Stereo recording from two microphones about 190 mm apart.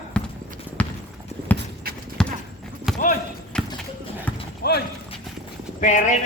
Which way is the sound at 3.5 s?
5° left (ahead or behind).